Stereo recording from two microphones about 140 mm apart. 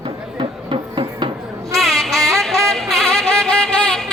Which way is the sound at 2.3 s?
Centre (ahead or behind).